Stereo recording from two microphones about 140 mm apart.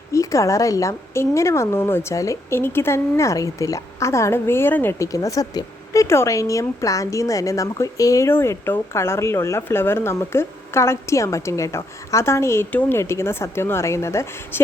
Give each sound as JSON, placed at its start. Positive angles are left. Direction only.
{"t": 0.1, "sound": "a woman's voice", "side_deg": 20}